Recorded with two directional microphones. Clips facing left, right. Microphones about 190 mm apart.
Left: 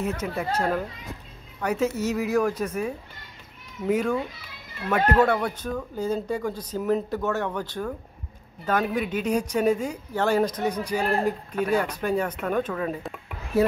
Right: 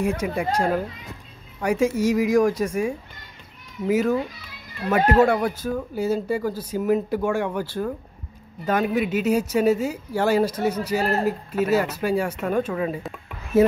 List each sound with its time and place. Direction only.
0.0 s speech: 10° right (ahead or behind)
5.2 s speech: 10° right (ahead or behind)
13.5 s speech: 20° right (ahead or behind)